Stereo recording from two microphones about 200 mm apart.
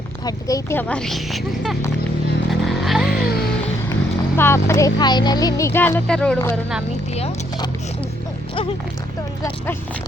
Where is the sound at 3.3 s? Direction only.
50° left (ahead or behind).